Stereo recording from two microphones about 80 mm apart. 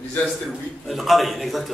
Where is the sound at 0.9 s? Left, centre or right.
Centre.